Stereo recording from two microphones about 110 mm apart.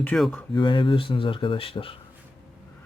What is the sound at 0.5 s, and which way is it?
Speech, 45° left (ahead or behind).